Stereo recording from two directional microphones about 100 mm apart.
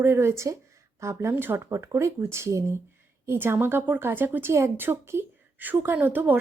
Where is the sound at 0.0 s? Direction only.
25° right (ahead or behind).